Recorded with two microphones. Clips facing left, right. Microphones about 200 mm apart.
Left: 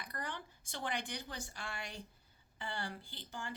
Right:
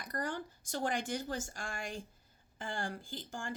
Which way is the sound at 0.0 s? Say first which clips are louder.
Right 6 dB; 45° right (ahead or behind).